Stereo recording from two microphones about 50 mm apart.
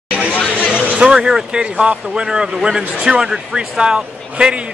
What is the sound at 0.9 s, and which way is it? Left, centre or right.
A man's voice, centre.